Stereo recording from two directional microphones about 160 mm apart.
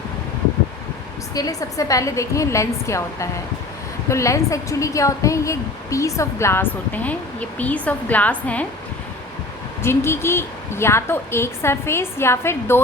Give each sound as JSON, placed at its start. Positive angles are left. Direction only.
{"t": 1.3, "sound": "a woman's voice", "side_deg": 20}
{"t": 9.8, "sound": "a woman's voice", "side_deg": 15}